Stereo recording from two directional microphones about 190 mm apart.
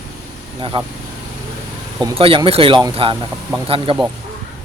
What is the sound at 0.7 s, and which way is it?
Speech, 25° right (ahead or behind).